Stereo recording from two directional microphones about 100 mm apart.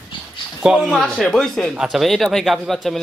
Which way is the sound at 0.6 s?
Centre (ahead or behind).